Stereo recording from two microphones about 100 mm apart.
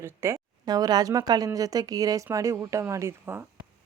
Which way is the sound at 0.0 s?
30° right (ahead or behind).